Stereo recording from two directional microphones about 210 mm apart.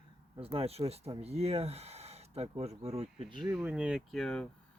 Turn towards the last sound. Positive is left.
turn(degrees=5)  # may be behind; listen again after turning